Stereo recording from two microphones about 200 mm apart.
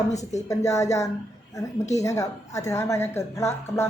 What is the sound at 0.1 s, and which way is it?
Speech, 35° left (ahead or behind).